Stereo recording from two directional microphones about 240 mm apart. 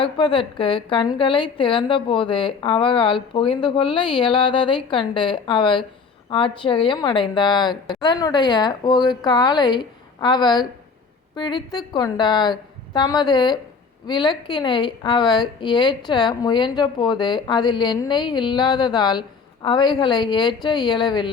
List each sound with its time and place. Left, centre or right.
0.0 s a woman's voice: left